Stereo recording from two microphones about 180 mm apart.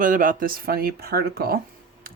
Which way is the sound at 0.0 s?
50° right (ahead or behind).